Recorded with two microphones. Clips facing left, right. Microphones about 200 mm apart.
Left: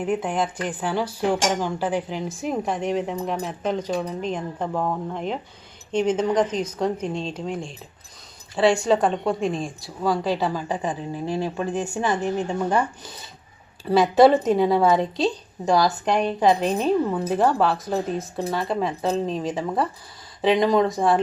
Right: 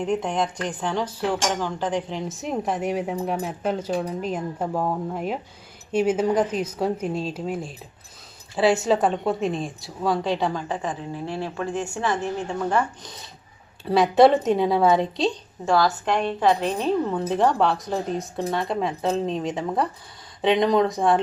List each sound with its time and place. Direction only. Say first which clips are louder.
0.0 s a woman's voice: even; 5° left (ahead or behind)
13.8 s speech: left 1 dB; centre (ahead or behind)
15.6 s speech: left 1 dB; 15° left (ahead or behind); by 21.2 s centre (ahead or behind)